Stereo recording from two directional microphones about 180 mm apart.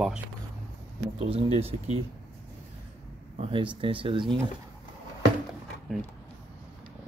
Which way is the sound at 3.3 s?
30° right (ahead or behind).